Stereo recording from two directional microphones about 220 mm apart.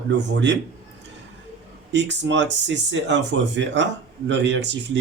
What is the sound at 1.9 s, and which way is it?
Speech, 55° right (ahead or behind).